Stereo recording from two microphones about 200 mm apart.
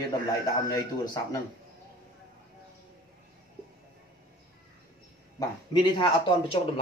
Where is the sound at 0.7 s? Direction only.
20° left (ahead or behind).